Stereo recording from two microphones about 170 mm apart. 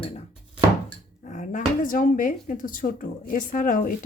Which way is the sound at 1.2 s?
45° left (ahead or behind).